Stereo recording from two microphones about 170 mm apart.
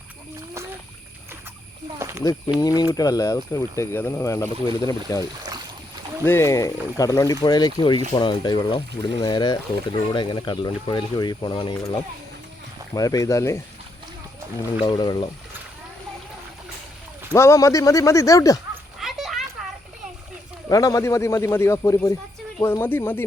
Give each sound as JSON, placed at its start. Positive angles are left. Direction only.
{"t": 2.0, "sound": "speech", "side_deg": -15}
{"t": 2.6, "sound": "speech", "side_deg": 20}
{"t": 6.2, "sound": "speech", "side_deg": 15}
{"t": 12.9, "sound": "speech", "side_deg": 20}
{"t": 14.8, "sound": "speech", "side_deg": 25}
{"t": 17.3, "sound": "speech", "side_deg": 15}
{"t": 18.9, "sound": "a sound", "side_deg": 0}
{"t": 20.7, "sound": "speech", "side_deg": 20}